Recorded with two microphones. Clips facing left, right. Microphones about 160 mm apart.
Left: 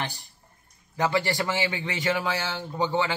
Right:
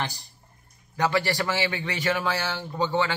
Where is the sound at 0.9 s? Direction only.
20° left (ahead or behind).